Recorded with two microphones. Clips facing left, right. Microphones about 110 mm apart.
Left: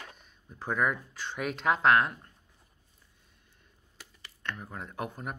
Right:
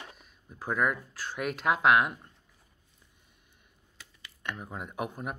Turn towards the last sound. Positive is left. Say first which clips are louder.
# right 2 dB
turn(degrees=-10)  # may be behind; listen again after turning